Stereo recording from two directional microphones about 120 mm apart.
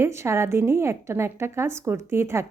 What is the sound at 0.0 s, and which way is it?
A woman's voice, 20° right (ahead or behind).